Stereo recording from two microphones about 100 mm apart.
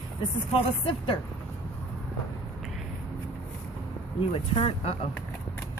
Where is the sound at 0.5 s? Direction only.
65° left (ahead or behind).